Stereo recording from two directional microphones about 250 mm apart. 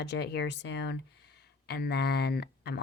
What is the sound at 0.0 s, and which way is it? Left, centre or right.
Speech, left.